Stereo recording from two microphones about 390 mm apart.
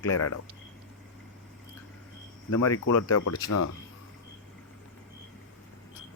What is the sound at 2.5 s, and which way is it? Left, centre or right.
Speech, left.